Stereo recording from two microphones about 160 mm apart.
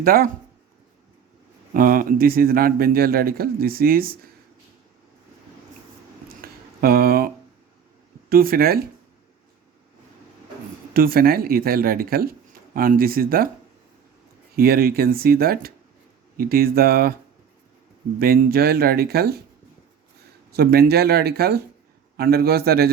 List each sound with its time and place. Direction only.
0.0 s speech: 65° right (ahead or behind)
1.7 s a man's voice: 60° right (ahead or behind)
6.2 s a sound: 70° right (ahead or behind)
8.3 s a man's voice: 65° right (ahead or behind)
10.9 s speech: 65° right (ahead or behind)
14.5 s a man's voice: 70° right (ahead or behind)
18.2 s a man's voice: 65° right (ahead or behind)
20.5 s a man's voice: 75° right (ahead or behind)